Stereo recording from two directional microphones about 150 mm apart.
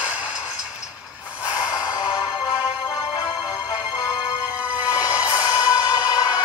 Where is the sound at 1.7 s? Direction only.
25° left (ahead or behind).